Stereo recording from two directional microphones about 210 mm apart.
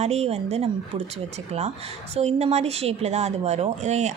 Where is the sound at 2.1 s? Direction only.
30° right (ahead or behind).